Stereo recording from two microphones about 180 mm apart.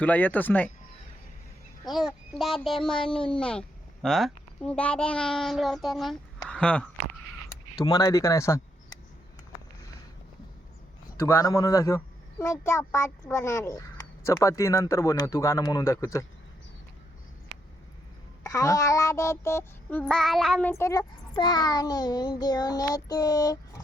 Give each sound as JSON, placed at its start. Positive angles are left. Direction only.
{"t": 0.0, "sound": "speech", "side_deg": 10}
{"t": 1.9, "sound": "a child's voice", "side_deg": 0}
{"t": 7.9, "sound": "speech", "side_deg": 20}
{"t": 11.2, "sound": "speech", "side_deg": 15}
{"t": 18.4, "sound": "a sound", "side_deg": 20}